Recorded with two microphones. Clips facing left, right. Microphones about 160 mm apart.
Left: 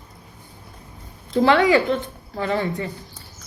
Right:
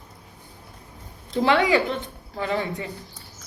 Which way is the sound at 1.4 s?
20° right (ahead or behind).